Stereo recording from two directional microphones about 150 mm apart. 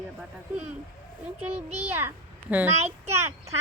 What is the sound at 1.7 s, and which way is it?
Speech, 15° right (ahead or behind).